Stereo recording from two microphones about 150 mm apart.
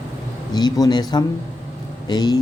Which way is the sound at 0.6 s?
25° left (ahead or behind).